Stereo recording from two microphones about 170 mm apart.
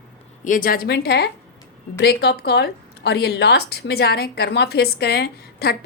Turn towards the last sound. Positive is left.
turn(degrees=70)  # may be behind; listen again after turning